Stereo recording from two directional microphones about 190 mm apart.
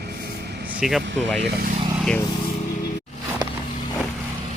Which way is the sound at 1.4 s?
50° right (ahead or behind).